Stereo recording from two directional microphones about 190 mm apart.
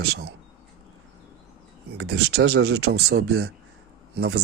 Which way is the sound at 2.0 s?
60° right (ahead or behind).